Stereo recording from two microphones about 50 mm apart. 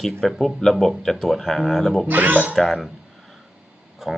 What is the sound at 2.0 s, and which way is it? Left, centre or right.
Speech, right.